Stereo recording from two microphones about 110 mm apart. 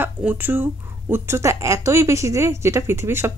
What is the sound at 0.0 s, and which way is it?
Speech, 15° right (ahead or behind).